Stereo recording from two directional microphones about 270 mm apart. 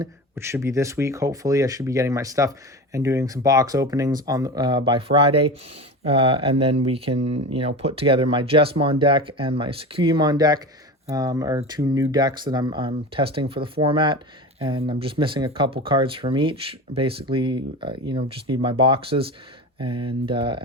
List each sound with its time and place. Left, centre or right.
0.0 s speech: centre